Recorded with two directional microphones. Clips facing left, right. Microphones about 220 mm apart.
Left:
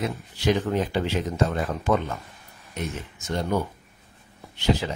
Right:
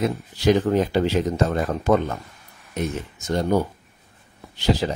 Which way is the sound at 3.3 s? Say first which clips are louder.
Right 5 dB; 40° right (ahead or behind).